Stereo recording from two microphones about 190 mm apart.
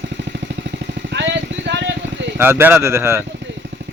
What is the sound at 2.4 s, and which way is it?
Speech, 10° right (ahead or behind).